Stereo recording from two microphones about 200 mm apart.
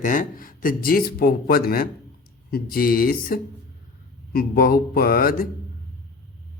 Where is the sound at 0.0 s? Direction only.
45° left (ahead or behind).